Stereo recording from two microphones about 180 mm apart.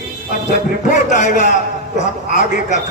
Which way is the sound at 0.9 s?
45° left (ahead or behind).